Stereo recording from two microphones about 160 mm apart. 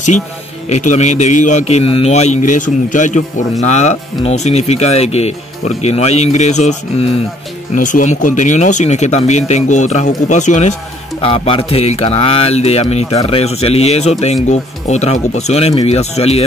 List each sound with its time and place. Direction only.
0.7 s speech: 45° left (ahead or behind)
11.1 s speech: 35° left (ahead or behind)